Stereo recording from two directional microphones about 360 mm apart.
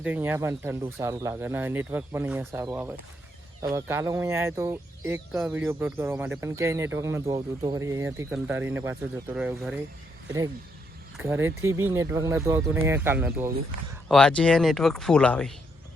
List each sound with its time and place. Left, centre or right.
0.0 s speech: centre
11.2 s speech: centre